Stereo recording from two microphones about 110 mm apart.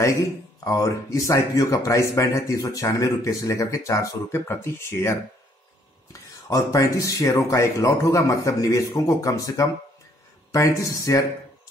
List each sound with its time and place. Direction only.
0.0 s speech: 30° left (ahead or behind)